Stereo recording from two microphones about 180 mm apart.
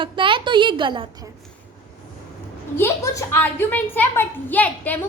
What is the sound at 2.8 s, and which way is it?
A woman's voice, 15° left (ahead or behind).